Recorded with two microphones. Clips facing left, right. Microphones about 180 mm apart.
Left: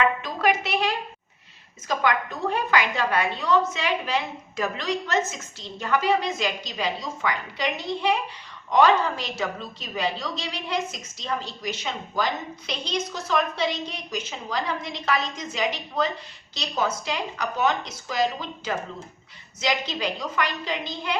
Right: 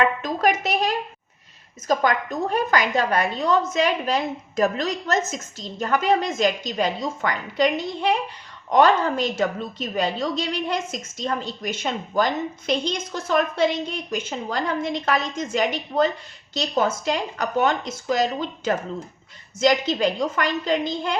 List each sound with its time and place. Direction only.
0.0 s a sound: 40° right (ahead or behind)
1.9 s a woman's voice: 40° right (ahead or behind)
8.7 s a woman's voice: 50° right (ahead or behind)